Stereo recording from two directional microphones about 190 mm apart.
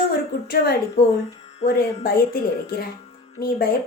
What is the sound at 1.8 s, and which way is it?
Speech, 50° left (ahead or behind).